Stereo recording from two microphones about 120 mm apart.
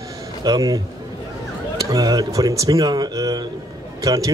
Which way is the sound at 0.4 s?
30° right (ahead or behind).